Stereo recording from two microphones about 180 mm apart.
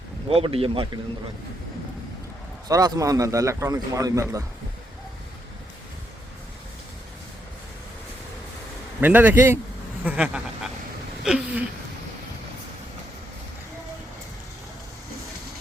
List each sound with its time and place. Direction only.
0.3 s speech: 30° right (ahead or behind)
2.6 s a man's voice: 20° right (ahead or behind)
9.0 s a man's voice: 10° right (ahead or behind)
11.2 s a sound: 5° right (ahead or behind)